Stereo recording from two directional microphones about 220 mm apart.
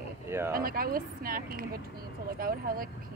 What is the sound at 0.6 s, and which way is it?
Speech, 40° right (ahead or behind).